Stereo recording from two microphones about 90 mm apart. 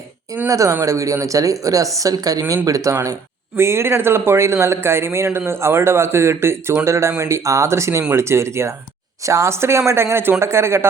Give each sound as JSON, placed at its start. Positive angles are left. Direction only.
{"t": 0.4, "sound": "speech", "side_deg": -35}